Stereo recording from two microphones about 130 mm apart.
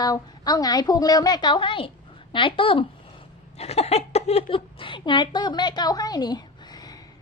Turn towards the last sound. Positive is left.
turn(degrees=30)  # may be behind; listen again after turning